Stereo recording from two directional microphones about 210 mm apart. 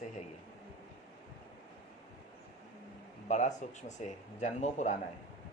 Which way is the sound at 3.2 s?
35° left (ahead or behind).